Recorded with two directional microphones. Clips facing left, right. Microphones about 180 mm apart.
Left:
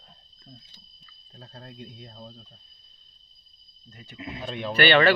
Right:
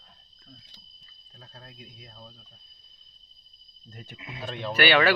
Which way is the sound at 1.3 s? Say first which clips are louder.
Left 5 dB; 15° left (ahead or behind).